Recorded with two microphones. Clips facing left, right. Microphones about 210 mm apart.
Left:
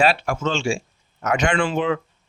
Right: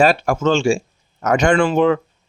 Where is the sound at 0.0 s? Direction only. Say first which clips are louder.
Right 5 dB; 45° right (ahead or behind).